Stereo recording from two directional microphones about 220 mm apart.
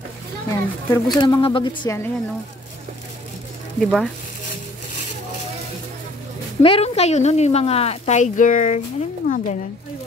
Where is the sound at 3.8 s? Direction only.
Centre (ahead or behind).